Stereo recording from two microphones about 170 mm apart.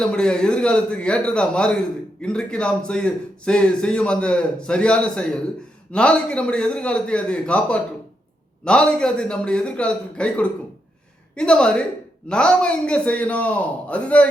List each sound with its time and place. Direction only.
0.0 s a man's voice: 5° left (ahead or behind)